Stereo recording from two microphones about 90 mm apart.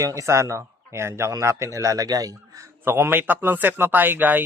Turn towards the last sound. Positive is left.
turn(degrees=-20)  # may be behind; listen again after turning